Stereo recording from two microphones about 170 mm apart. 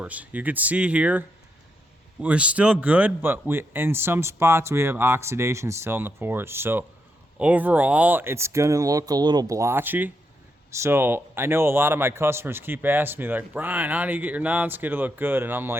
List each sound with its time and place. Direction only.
0.0 s a man's voice: 10° right (ahead or behind)
2.2 s a man's voice: 5° right (ahead or behind)